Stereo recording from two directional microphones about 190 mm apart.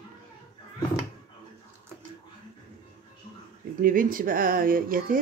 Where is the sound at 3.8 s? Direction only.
45° right (ahead or behind).